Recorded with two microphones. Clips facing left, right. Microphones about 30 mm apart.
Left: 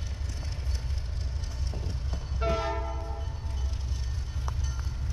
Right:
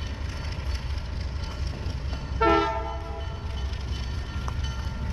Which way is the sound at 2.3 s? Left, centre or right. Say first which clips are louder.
Right 9 dB; right.